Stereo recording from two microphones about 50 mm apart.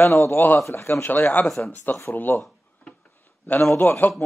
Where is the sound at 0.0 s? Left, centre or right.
Left.